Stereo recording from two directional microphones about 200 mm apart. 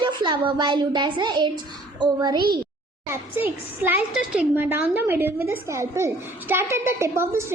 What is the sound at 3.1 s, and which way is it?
A woman's voice, 10° right (ahead or behind).